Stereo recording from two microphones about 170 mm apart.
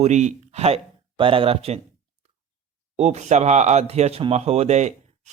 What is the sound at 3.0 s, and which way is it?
A man's voice, 40° right (ahead or behind).